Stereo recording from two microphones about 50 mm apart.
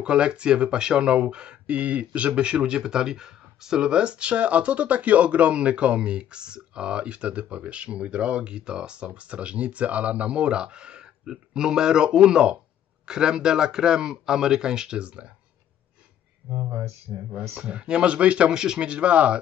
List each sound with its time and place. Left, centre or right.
0.0 s speech: centre
16.5 s speech: right
17.6 s speech: right